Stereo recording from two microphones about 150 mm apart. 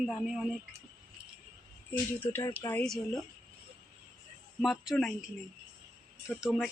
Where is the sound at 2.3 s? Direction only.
20° left (ahead or behind); by 3.2 s 5° left (ahead or behind).